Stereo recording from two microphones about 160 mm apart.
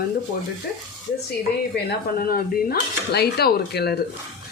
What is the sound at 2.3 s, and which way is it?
Speech, 80° left.